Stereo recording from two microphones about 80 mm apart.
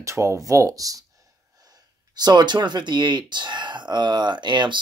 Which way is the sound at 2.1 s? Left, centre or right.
Right.